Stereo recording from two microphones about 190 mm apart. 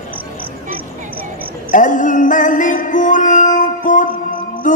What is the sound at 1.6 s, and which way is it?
Music, 40° left (ahead or behind).